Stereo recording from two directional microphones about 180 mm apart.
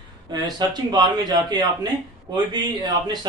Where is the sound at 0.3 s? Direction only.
20° right (ahead or behind).